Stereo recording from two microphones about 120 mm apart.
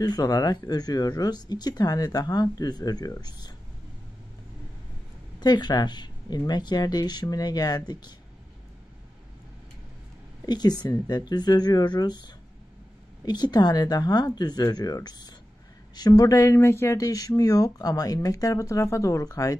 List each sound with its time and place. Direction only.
0.0 s speech: 35° left (ahead or behind)
5.4 s speech: 35° left (ahead or behind)
10.4 s speech: 35° left (ahead or behind)